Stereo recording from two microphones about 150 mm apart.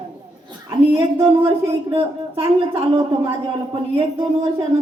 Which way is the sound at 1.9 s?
40° right (ahead or behind).